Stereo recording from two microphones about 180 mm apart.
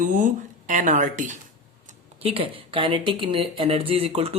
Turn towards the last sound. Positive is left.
turn(degrees=-35)  # may be behind; listen again after turning